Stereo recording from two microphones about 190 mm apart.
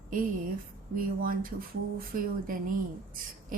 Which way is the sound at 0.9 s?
50° right (ahead or behind).